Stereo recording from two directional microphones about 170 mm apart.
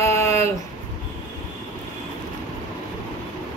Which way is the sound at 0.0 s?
15° left (ahead or behind).